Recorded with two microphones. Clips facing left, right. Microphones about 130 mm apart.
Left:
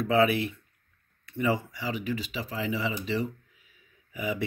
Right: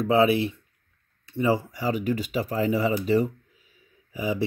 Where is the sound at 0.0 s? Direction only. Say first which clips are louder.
Right 3 dB; 30° right (ahead or behind).